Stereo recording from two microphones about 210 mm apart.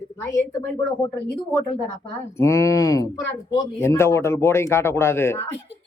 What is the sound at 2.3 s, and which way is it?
A man's voice, 15° left (ahead or behind).